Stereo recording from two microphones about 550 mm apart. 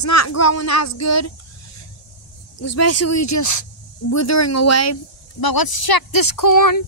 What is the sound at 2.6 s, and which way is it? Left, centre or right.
Speech, left.